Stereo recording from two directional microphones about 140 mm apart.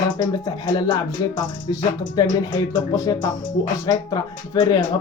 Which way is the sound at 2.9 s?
25° left (ahead or behind).